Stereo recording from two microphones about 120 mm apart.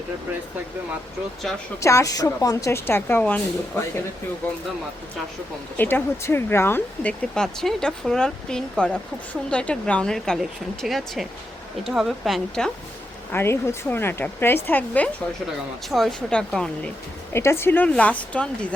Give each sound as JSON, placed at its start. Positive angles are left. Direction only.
{"t": 1.5, "sound": "speech", "side_deg": 5}
{"t": 1.8, "sound": "speech", "side_deg": 25}
{"t": 5.7, "sound": "speech", "side_deg": 15}
{"t": 13.3, "sound": "speech", "side_deg": 20}
{"t": 17.3, "sound": "speech", "side_deg": 20}